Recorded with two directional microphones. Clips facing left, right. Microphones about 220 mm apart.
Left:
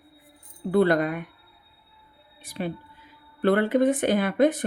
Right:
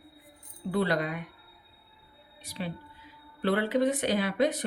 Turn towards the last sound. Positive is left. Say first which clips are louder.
# left 5 dB
turn(degrees=50)  # may be behind; listen again after turning